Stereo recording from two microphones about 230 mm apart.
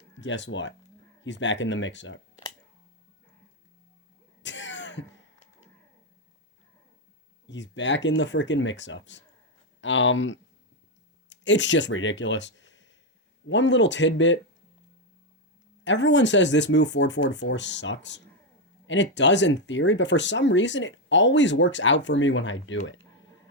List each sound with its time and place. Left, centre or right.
0.2 s speech: left
4.4 s throat clearing: left
7.4 s speech: left
15.8 s speech: left